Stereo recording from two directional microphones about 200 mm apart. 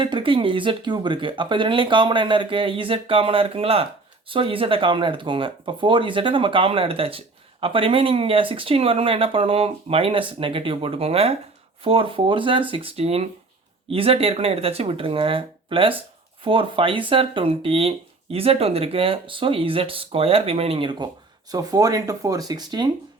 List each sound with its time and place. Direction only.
0.0 s speech: 25° right (ahead or behind)